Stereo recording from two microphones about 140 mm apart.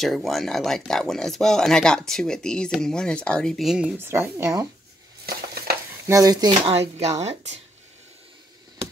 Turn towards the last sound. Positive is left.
turn(degrees=-50)  # may be behind; listen again after turning